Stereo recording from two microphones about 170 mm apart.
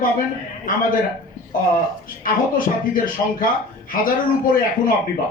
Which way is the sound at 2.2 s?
55° left (ahead or behind).